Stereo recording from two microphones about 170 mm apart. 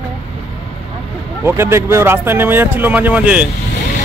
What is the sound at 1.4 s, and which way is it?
Speech, 15° right (ahead or behind).